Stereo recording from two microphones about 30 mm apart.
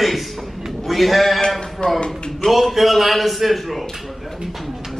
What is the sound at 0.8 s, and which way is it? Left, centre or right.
Speech, centre.